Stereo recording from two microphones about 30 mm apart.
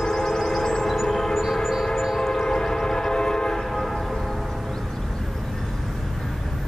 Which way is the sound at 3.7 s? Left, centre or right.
Centre.